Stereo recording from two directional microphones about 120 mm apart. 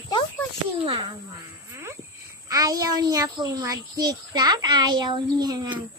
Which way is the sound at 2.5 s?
30° right (ahead or behind).